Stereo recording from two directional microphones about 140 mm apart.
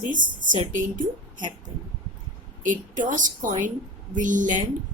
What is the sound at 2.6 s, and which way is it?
A woman's voice, 70° right (ahead or behind).